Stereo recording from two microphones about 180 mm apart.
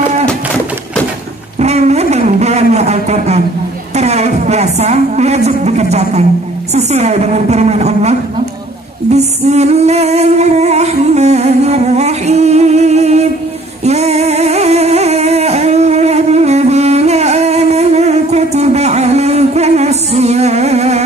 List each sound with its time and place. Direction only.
1.6 s a sound: 40° right (ahead or behind)
3.9 s a woman's voice: 35° right (ahead or behind)
9.1 s singing: 40° right (ahead or behind)